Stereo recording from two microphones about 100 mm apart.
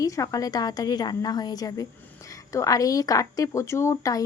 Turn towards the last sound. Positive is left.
turn(degrees=30)  # may be behind; listen again after turning